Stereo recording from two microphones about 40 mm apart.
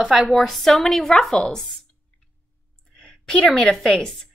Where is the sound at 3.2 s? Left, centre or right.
Centre.